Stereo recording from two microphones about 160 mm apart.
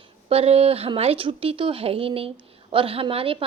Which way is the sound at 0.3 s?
40° right (ahead or behind).